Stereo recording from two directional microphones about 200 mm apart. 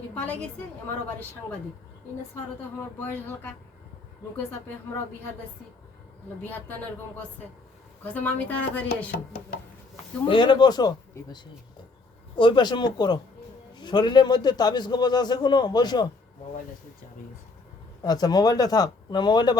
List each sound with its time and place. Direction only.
0.1 s a woman's voice: 5° left (ahead or behind)
2.6 s speech: 10° left (ahead or behind)
6.4 s speech: 10° left (ahead or behind)
8.0 s speech: 10° left (ahead or behind)
10.2 s a man's voice: 25° left (ahead or behind)
18.0 s a man's voice: 20° left (ahead or behind)